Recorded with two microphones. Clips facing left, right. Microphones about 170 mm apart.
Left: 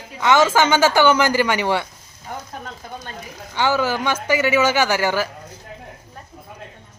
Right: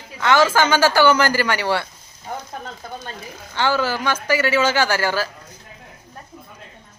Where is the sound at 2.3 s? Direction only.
35° right (ahead or behind).